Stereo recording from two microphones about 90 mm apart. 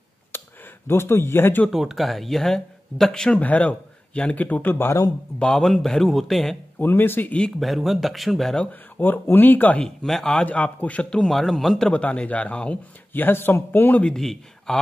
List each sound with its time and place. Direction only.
0.3 s a sound: 25° left (ahead or behind)
0.8 s speech: 25° left (ahead or behind)
1.7 s a man's voice: 5° right (ahead or behind); by 5.0 s 25° left (ahead or behind)
5.4 s speech: 5° left (ahead or behind)
6.8 s speech: 25° left (ahead or behind)
7.4 s speech: centre (ahead or behind)
9.0 s speech: 20° left (ahead or behind)
10.0 s a man's voice: 5° left (ahead or behind)
14.1 s speech: 5° left (ahead or behind)